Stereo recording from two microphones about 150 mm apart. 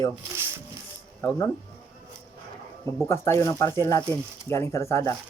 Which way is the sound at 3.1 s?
20° left (ahead or behind).